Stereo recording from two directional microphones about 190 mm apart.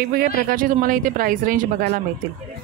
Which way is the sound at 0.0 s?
50° right (ahead or behind).